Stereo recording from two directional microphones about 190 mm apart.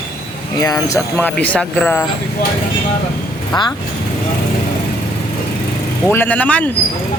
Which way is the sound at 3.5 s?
20° left (ahead or behind).